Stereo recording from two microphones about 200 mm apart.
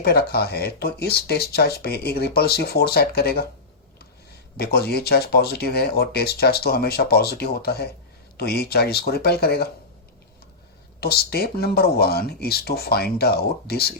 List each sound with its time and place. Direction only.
0.0 s speech: 50° left (ahead or behind)
4.5 s speech: 50° left (ahead or behind)
11.0 s speech: 50° left (ahead or behind)